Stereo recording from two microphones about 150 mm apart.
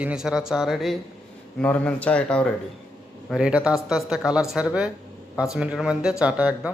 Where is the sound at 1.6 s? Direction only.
10° left (ahead or behind).